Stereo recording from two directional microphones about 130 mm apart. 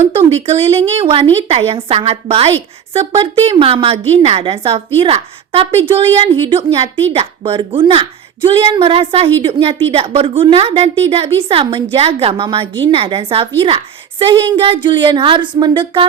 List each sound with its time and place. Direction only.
0.2 s a woman's voice: 50° right (ahead or behind)